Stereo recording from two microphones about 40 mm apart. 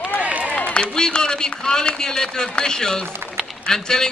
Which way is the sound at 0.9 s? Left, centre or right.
Centre.